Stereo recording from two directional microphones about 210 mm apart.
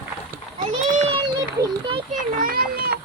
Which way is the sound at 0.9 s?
30° right (ahead or behind).